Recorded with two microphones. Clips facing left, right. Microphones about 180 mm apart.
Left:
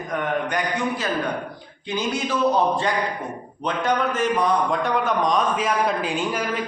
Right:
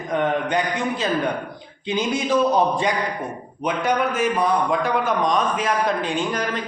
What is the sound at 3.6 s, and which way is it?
A man's voice, 10° right (ahead or behind).